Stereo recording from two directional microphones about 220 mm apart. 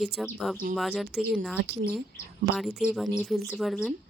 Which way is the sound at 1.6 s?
45° right (ahead or behind).